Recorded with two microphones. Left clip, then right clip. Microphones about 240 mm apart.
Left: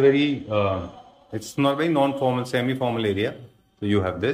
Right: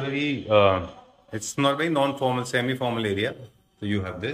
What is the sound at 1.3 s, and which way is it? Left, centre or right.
A man's voice, centre.